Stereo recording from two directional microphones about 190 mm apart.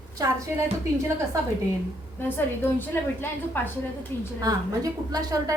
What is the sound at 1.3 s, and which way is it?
Speech, 15° right (ahead or behind).